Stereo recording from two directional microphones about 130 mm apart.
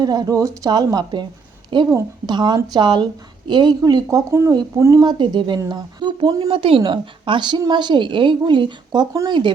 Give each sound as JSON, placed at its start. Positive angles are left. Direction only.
{"t": 0.0, "sound": "a woman's voice", "side_deg": -30}
{"t": 4.3, "sound": "speech", "side_deg": -20}
{"t": 5.1, "sound": "a woman's voice", "side_deg": -35}
{"t": 6.5, "sound": "a woman's voice", "side_deg": -45}